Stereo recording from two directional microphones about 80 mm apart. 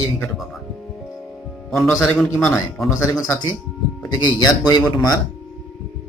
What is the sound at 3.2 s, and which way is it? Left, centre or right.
Speech, left.